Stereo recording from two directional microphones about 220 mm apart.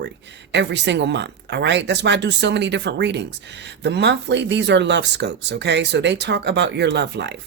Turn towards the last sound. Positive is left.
turn(degrees=-50)  # may be behind; listen again after turning